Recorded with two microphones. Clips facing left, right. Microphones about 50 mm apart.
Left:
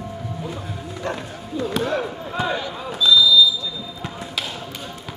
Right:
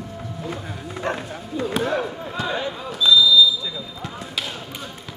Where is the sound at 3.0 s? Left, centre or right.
Centre.